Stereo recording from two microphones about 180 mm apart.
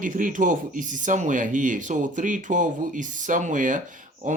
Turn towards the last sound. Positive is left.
turn(degrees=-45)  # may be behind; listen again after turning